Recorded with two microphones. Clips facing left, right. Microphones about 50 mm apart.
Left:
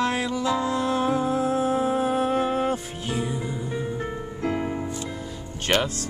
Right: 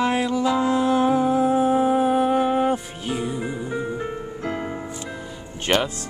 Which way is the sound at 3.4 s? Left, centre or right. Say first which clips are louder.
Right 3 dB; right.